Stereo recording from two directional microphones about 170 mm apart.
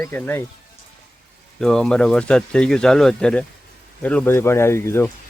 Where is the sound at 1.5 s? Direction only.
5° left (ahead or behind).